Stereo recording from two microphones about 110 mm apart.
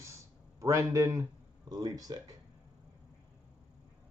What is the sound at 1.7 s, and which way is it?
Speech, 40° right (ahead or behind).